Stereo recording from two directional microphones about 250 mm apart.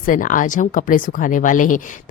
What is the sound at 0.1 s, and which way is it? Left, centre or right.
Speech, left.